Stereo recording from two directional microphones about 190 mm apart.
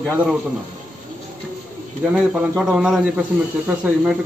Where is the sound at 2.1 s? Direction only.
5° right (ahead or behind).